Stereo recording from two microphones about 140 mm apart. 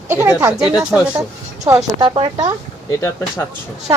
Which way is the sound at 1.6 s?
25° right (ahead or behind).